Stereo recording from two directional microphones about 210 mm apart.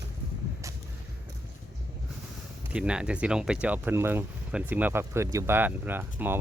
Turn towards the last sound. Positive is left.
turn(degrees=-10)  # may be behind; listen again after turning